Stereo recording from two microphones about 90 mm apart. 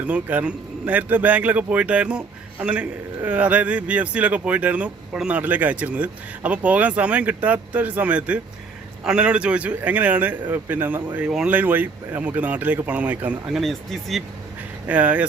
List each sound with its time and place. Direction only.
0.0 s speech: 15° right (ahead or behind)
13.5 s speech: centre (ahead or behind)
14.8 s speech: 15° right (ahead or behind)